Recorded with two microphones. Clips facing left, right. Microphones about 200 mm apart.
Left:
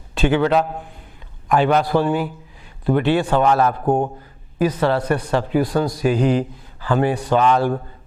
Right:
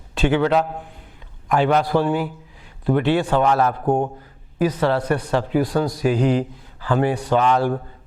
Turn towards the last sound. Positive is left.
turn(degrees=15)  # may be behind; listen again after turning